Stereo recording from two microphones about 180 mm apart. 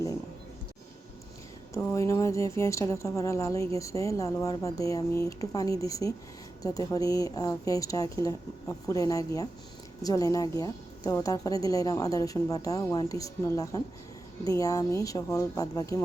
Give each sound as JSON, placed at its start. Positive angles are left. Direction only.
{"t": 1.7, "sound": "a woman's voice", "side_deg": 15}